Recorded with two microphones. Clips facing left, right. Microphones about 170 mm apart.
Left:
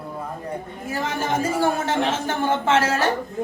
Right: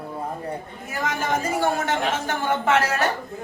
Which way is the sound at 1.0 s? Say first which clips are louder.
Left 1 dB; 30° left (ahead or behind).